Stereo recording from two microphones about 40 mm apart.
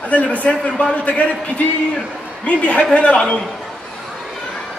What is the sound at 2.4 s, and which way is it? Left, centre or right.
Speech, left.